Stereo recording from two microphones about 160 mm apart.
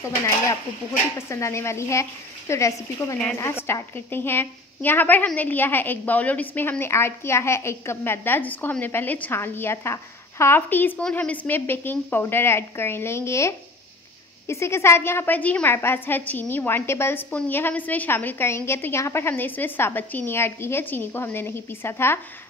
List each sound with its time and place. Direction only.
1.1 s a woman's voice: 15° left (ahead or behind)